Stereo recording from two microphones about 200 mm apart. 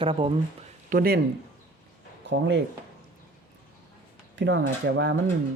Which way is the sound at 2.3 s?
60° right (ahead or behind).